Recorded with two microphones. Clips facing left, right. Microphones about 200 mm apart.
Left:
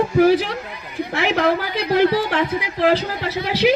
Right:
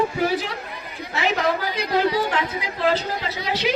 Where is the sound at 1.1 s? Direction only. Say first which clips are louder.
Left 3 dB; 60° left (ahead or behind).